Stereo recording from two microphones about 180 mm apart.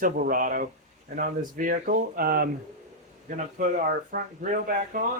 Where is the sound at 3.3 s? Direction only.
45° right (ahead or behind).